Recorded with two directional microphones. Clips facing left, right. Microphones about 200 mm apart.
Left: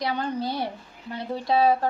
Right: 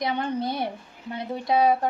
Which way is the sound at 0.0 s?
25° right (ahead or behind).